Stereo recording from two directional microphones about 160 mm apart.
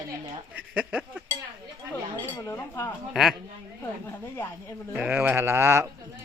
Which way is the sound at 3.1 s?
Centre (ahead or behind).